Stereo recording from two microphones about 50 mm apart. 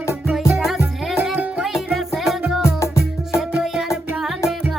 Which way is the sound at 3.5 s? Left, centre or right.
Centre.